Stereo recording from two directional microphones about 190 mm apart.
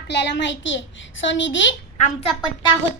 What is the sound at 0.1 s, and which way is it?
A child's voice, 65° left (ahead or behind).